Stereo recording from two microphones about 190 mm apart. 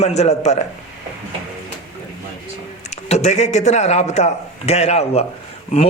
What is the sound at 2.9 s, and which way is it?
A man's voice, 35° left (ahead or behind).